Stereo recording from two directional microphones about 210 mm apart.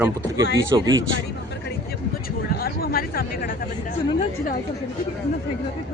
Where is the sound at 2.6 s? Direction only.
45° left (ahead or behind).